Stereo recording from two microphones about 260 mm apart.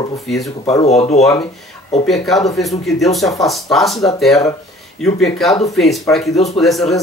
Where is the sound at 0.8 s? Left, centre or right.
Left.